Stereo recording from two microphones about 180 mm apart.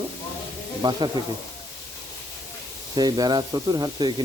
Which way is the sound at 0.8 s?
25° right (ahead or behind).